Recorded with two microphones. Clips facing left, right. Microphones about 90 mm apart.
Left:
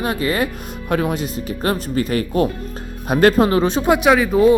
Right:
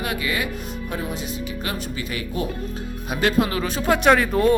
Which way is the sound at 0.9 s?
60° left (ahead or behind).